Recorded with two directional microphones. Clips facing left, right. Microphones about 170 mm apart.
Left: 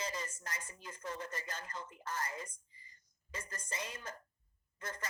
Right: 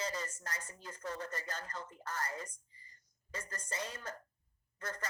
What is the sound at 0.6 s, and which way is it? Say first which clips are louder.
Speech: right 1 dB; 35° right (ahead or behind).